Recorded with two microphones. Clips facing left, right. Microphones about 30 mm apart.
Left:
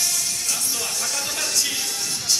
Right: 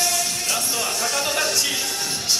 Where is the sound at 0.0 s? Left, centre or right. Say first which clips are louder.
Right 3 dB; right.